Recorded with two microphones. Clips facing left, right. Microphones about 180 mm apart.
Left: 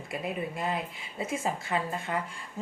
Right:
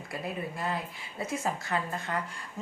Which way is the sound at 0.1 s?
20° left (ahead or behind).